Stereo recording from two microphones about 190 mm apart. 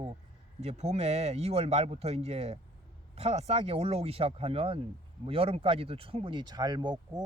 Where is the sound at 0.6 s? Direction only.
35° right (ahead or behind).